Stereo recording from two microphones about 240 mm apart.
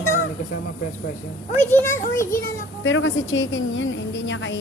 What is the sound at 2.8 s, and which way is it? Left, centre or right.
A woman's voice, left.